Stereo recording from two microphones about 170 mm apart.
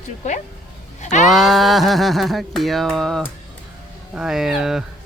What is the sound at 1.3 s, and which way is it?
Speech, centre (ahead or behind).